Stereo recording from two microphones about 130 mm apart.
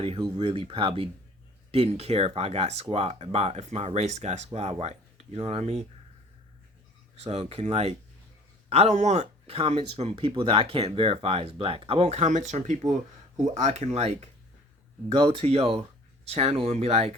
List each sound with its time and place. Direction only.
0.2 s speech: 35° right (ahead or behind)
7.3 s speech: 55° right (ahead or behind)
15.1 s speech: 40° right (ahead or behind)